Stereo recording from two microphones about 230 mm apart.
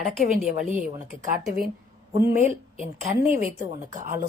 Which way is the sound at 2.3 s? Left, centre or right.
Right.